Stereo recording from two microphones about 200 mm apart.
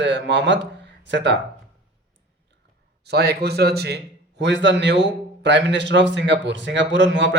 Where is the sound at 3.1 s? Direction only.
55° right (ahead or behind).